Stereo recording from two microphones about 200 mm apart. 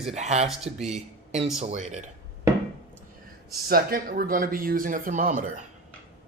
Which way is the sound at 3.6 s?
45° right (ahead or behind).